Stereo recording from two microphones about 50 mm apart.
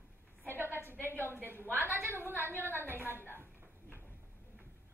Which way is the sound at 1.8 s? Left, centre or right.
Right.